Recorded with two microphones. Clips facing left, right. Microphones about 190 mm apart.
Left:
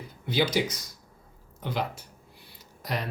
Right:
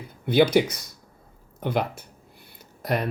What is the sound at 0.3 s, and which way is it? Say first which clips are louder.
Speech: right 7 dB; 60° right (ahead or behind).